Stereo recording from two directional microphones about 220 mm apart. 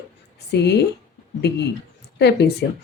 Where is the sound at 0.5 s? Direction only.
50° left (ahead or behind).